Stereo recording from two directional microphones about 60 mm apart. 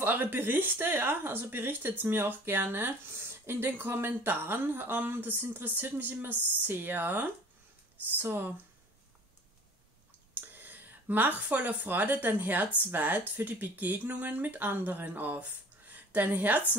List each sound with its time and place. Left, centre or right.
0.0 s speech: right
10.3 s a woman's voice: right